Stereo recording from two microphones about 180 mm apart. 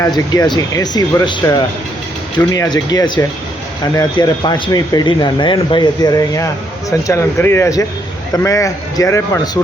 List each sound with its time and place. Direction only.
0.3 s speech: 20° left (ahead or behind)